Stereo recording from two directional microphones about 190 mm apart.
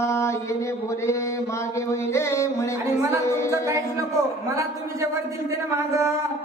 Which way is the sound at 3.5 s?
15° right (ahead or behind).